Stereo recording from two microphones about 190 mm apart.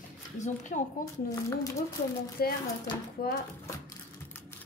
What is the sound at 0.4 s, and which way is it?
Speech, 40° left (ahead or behind).